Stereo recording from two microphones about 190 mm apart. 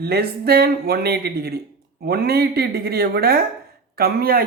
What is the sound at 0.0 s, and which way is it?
A man's voice, 55° right (ahead or behind).